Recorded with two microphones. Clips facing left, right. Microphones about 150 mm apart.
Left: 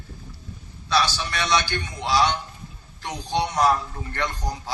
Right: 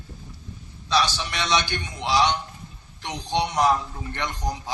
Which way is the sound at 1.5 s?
15° right (ahead or behind).